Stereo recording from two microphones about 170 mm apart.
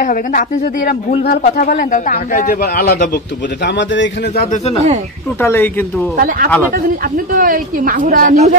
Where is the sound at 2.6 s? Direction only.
65° left (ahead or behind).